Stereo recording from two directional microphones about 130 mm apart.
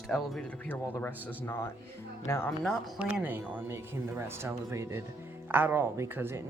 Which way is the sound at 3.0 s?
10° right (ahead or behind).